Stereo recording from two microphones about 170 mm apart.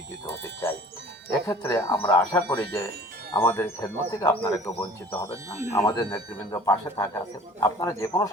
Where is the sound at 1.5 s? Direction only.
15° left (ahead or behind).